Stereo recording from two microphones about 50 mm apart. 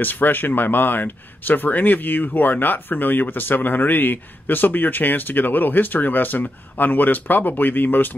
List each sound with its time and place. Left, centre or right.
0.0 s speech: left